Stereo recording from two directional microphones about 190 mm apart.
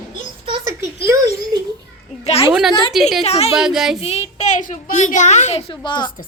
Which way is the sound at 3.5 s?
Centre (ahead or behind).